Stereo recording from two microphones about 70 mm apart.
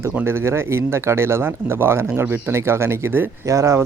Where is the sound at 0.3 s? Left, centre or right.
Right.